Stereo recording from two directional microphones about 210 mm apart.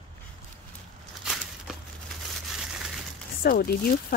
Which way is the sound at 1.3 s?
5° right (ahead or behind).